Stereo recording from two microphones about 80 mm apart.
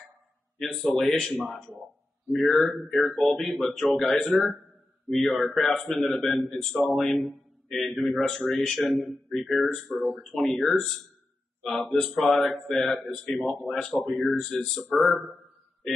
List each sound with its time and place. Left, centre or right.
0.6 s a man's voice: centre